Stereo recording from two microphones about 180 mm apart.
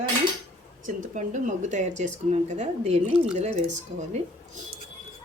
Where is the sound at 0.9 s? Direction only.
45° right (ahead or behind).